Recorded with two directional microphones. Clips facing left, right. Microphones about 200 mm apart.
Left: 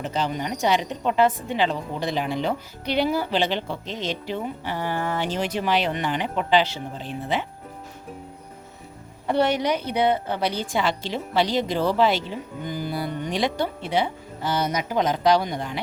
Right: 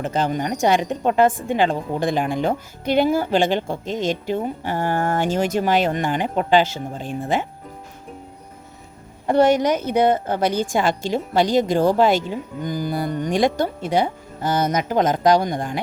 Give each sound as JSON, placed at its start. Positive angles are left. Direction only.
{"t": 0.0, "sound": "a woman's voice", "side_deg": -50}
{"t": 9.2, "sound": "a woman's voice", "side_deg": -45}